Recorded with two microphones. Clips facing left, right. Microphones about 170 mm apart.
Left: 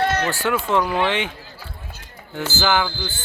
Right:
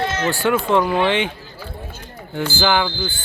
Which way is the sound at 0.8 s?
20° right (ahead or behind).